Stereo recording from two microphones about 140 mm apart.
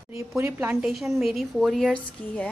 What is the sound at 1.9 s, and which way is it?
Speech, 10° left (ahead or behind).